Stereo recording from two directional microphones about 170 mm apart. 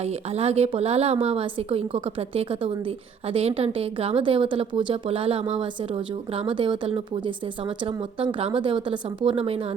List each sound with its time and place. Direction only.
0.0 s a woman's voice: 35° right (ahead or behind)